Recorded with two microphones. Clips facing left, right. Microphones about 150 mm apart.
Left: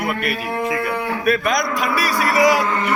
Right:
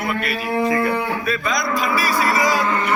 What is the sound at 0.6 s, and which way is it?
Speech, 5° left (ahead or behind).